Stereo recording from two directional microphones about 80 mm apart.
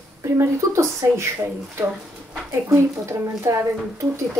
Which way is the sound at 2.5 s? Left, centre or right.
Right.